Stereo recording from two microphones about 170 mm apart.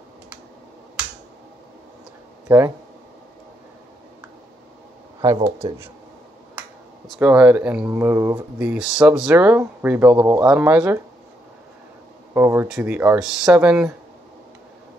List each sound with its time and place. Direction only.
2.4 s speech: 15° right (ahead or behind)
5.6 s speech: 30° right (ahead or behind)
7.1 s speech: 5° right (ahead or behind)
12.4 s speech: 15° right (ahead or behind)